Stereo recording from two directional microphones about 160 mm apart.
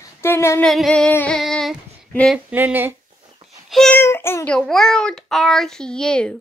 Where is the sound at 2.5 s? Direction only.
10° right (ahead or behind).